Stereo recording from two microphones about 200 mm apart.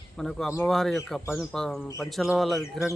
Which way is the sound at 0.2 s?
Centre (ahead or behind).